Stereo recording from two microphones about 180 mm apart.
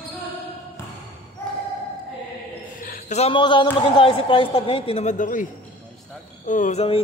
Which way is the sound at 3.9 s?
30° left (ahead or behind).